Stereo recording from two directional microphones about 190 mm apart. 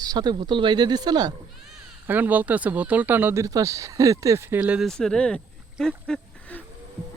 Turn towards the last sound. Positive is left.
turn(degrees=5)  # may be behind; listen again after turning